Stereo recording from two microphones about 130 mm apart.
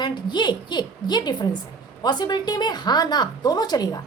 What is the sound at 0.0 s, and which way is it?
A woman's voice, 35° left (ahead or behind).